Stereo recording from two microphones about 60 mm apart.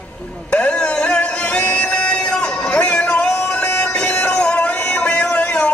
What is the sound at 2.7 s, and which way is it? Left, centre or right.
Music, centre.